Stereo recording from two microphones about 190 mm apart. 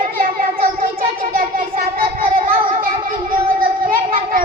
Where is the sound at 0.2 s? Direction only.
50° right (ahead or behind).